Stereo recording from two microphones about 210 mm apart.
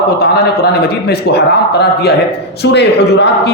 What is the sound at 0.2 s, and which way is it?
A woman's voice, 50° left (ahead or behind).